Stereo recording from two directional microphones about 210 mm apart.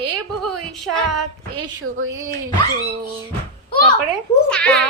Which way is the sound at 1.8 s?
75° right (ahead or behind).